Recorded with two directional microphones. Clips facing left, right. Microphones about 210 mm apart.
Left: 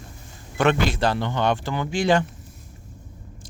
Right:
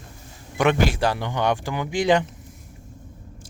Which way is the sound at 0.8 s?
10° right (ahead or behind).